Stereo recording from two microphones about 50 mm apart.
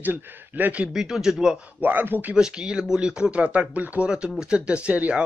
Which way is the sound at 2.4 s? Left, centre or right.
Centre.